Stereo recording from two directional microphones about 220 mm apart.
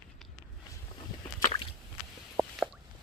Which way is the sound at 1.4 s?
20° left (ahead or behind).